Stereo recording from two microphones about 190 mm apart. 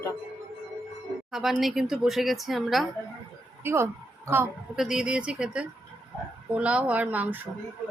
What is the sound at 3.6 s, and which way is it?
Speech, 15° right (ahead or behind).